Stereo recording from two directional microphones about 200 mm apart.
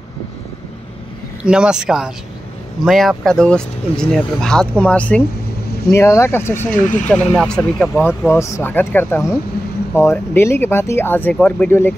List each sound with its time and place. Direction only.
1.4 s speech: 5° right (ahead or behind); by 6.7 s 10° left (ahead or behind)
6.7 s speech: 40° left (ahead or behind)
7.1 s speech: 5° left (ahead or behind)